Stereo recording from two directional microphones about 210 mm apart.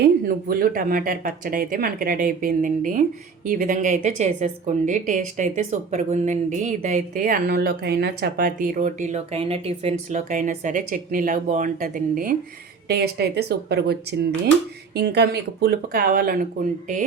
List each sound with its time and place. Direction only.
0.0 s speech: 45° right (ahead or behind)